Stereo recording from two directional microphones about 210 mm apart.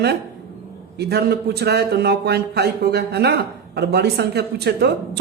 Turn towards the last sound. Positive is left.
turn(degrees=-50)  # may be behind; listen again after turning